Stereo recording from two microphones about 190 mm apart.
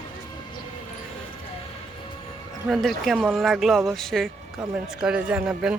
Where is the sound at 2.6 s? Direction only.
Centre (ahead or behind).